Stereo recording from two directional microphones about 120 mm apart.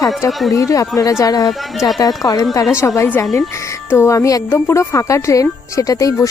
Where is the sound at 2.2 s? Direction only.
35° left (ahead or behind).